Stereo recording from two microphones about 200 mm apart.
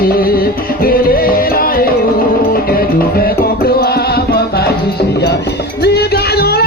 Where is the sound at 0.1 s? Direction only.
45° left (ahead or behind).